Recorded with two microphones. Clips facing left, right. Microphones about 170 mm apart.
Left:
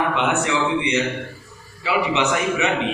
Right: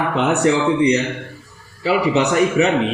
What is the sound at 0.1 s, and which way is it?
A woman's voice, 40° right (ahead or behind).